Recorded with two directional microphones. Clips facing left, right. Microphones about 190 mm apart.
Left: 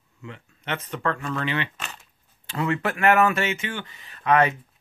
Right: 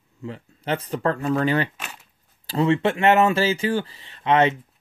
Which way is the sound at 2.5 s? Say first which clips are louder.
Right 6 dB; 30° right (ahead or behind).